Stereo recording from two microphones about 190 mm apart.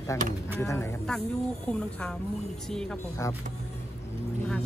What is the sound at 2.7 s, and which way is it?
Speech, 5° left (ahead or behind).